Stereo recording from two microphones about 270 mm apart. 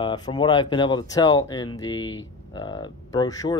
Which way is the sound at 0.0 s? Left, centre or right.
Centre.